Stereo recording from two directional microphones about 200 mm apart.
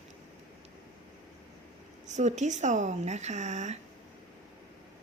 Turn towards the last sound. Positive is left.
turn(degrees=-35)  # may be behind; listen again after turning